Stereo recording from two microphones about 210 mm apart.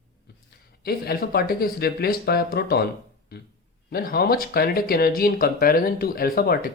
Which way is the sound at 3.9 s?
45° left (ahead or behind).